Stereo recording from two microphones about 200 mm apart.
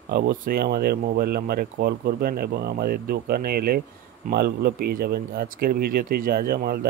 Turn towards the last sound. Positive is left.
turn(degrees=-50)  # may be behind; listen again after turning